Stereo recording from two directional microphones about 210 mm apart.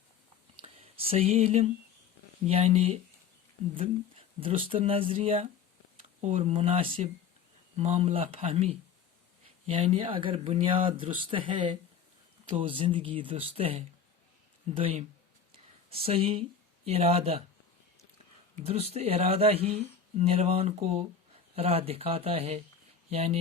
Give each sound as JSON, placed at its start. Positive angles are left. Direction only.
{"t": 0.6, "sound": "speech", "side_deg": -30}
{"t": 4.4, "sound": "speech", "side_deg": -25}
{"t": 18.6, "sound": "speech", "side_deg": -30}